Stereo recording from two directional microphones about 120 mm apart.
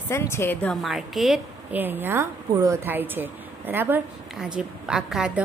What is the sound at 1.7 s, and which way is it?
A woman's voice, 15° right (ahead or behind).